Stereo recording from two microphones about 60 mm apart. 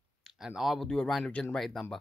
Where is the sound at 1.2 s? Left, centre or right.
Centre.